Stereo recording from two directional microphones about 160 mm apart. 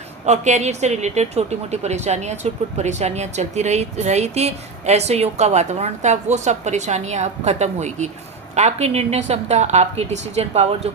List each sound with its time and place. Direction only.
0.3 s speech: 45° right (ahead or behind)